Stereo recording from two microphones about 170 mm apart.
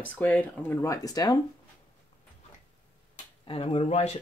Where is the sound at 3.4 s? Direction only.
35° left (ahead or behind).